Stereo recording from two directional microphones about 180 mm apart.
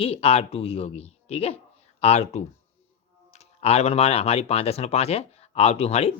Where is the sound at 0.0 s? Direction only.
35° left (ahead or behind).